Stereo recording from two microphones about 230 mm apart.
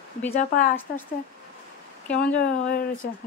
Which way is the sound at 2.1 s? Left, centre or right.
Centre.